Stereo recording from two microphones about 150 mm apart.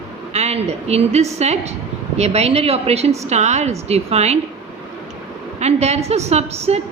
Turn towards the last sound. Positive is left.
turn(degrees=-45)  # may be behind; listen again after turning